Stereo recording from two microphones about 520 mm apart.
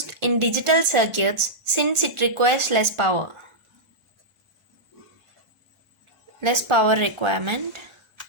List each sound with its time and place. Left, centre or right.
0.1 s a woman's voice: right
6.4 s a woman's voice: right